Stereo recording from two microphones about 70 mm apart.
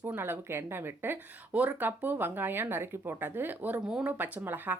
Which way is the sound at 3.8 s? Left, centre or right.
Centre.